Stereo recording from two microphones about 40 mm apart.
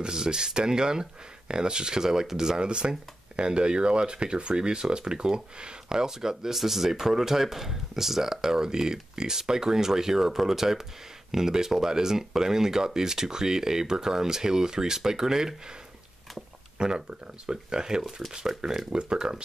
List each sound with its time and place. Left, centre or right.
0.0 s speech: centre